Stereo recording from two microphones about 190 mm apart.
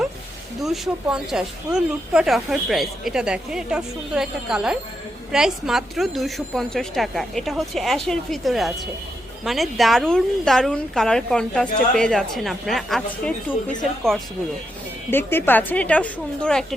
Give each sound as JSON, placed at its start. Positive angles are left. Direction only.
{"t": 0.6, "sound": "speech", "side_deg": 0}
{"t": 15.1, "sound": "a woman's voice", "side_deg": 10}